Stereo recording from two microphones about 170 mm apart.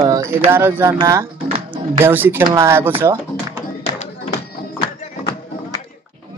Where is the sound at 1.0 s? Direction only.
15° right (ahead or behind).